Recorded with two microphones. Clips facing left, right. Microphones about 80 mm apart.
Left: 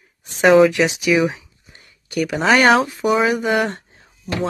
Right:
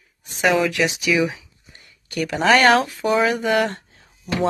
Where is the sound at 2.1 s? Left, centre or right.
Centre.